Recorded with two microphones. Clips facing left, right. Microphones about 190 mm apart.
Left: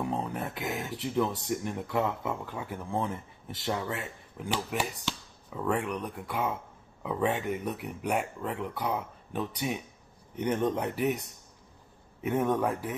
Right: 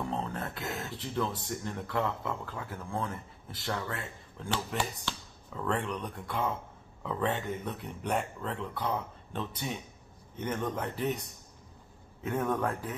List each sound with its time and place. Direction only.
0.0 s a sound: 15° left (ahead or behind)
1.0 s speech: 15° left (ahead or behind)
12.2 s speech: 15° left (ahead or behind)